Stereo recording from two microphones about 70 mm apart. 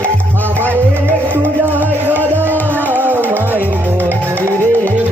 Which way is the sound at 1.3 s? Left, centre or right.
Right.